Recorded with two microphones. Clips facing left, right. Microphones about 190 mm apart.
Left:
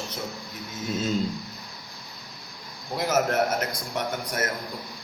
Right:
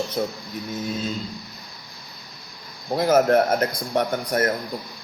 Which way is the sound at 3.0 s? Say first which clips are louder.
Right 7 dB; 55° right (ahead or behind).